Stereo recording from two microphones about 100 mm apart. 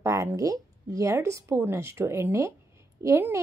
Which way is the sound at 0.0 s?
30° right (ahead or behind).